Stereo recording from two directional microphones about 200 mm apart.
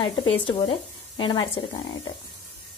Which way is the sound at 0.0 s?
25° left (ahead or behind).